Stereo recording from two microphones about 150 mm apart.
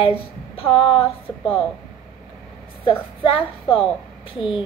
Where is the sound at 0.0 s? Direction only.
40° left (ahead or behind).